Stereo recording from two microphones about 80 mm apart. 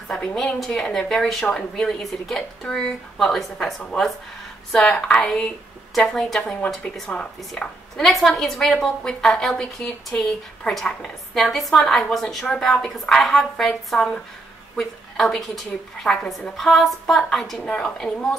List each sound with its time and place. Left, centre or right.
0.1 s a woman's voice: centre